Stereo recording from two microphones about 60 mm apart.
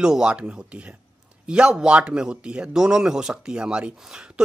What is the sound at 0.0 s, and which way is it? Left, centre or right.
Speech, centre.